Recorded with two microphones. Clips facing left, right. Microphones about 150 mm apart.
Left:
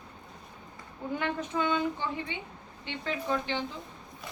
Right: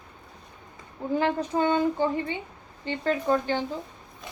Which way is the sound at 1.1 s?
35° right (ahead or behind).